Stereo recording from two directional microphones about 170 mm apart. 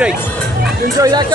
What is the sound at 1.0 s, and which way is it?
Speech, 25° right (ahead or behind).